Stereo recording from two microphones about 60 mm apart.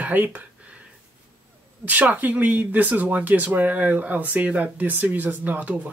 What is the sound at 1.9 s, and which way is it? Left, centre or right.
Speech, right.